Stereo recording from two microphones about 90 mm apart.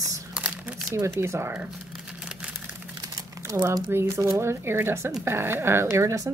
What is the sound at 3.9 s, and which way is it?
A woman's voice, 30° right (ahead or behind).